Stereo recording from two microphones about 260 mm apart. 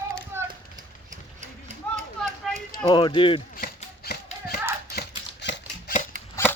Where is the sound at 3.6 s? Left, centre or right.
Left.